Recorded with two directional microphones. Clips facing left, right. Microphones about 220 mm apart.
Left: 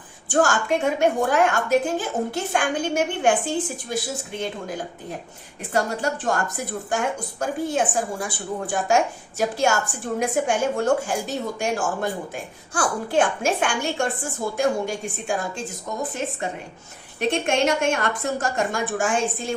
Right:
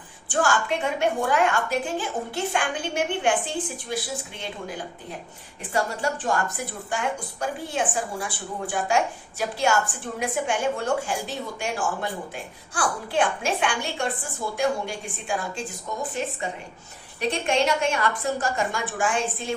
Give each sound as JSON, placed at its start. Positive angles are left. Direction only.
{"t": 0.3, "sound": "a woman's voice", "side_deg": 45}
{"t": 5.7, "sound": "a woman's voice", "side_deg": 45}
{"t": 17.2, "sound": "a woman's voice", "side_deg": 45}